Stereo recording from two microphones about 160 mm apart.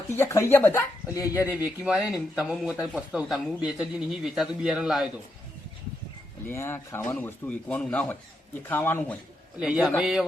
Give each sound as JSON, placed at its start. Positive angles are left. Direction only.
{"t": 0.1, "sound": "speech", "side_deg": 15}
{"t": 1.4, "sound": "speech", "side_deg": -10}
{"t": 6.4, "sound": "speech", "side_deg": 15}
{"t": 9.6, "sound": "speech", "side_deg": -5}